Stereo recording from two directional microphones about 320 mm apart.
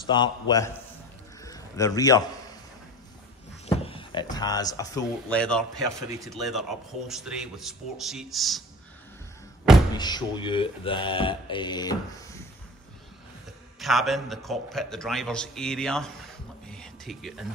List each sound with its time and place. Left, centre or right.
0.0 s speech: centre
1.4 s a sound: centre
3.6 s speech: centre
5.9 s a man's voice: centre
9.9 s speech: centre
13.7 s a man's voice: centre
16.6 s a sound: centre